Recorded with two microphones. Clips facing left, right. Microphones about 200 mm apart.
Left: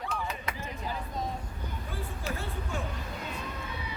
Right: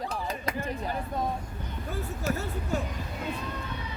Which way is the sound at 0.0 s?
35° right (ahead or behind).